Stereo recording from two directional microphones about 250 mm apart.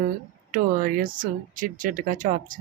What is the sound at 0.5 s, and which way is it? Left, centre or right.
Speech, right.